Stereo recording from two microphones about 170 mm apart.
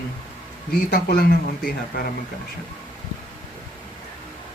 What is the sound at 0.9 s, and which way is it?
Speech, 60° left (ahead or behind).